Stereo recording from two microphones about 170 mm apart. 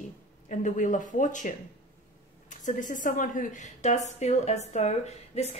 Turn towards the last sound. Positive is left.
turn(degrees=40)  # may be behind; listen again after turning